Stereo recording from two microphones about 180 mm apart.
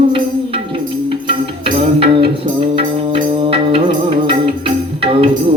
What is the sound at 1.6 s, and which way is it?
Music, 30° right (ahead or behind).